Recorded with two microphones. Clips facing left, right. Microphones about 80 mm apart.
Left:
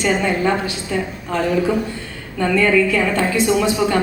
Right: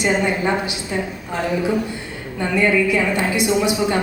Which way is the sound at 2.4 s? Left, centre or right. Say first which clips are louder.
Left 2 dB; centre.